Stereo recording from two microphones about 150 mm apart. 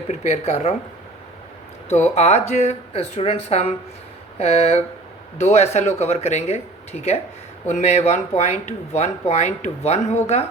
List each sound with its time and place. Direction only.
0.1 s speech: 45° left (ahead or behind)
1.9 s speech: 45° left (ahead or behind)
7.7 s speech: 50° left (ahead or behind)